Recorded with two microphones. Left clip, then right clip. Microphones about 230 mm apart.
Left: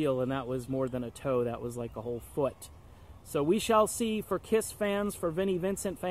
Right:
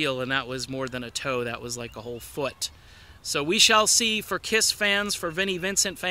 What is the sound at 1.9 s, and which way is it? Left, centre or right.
Speech, right.